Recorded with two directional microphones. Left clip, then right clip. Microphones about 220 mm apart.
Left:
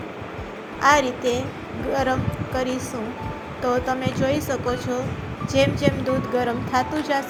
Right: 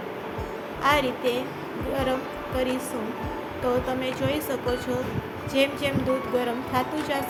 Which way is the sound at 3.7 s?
10° left (ahead or behind).